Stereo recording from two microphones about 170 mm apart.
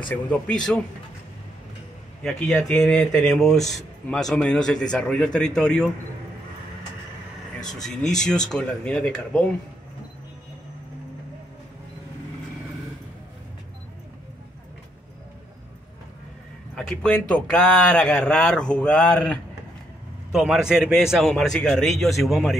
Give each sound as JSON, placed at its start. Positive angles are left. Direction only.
{"t": 0.1, "sound": "speech", "side_deg": 5}
{"t": 2.2, "sound": "speech", "side_deg": 0}
{"t": 7.6, "sound": "speech", "side_deg": 5}
{"t": 16.7, "sound": "speech", "side_deg": 5}
{"t": 20.3, "sound": "speech", "side_deg": 0}